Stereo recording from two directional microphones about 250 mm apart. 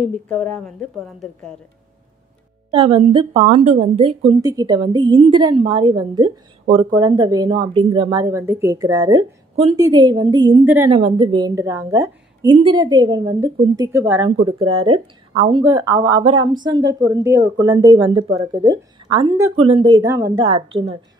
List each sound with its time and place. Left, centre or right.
0.0 s a woman's voice: centre
2.7 s a woman's voice: right
10.9 s speech: right
14.4 s a woman's voice: right